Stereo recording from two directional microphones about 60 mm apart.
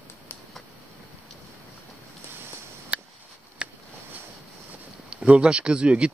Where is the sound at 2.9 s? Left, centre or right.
Right.